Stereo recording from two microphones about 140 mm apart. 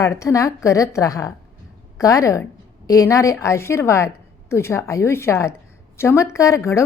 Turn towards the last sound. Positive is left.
turn(degrees=20)  # may be behind; listen again after turning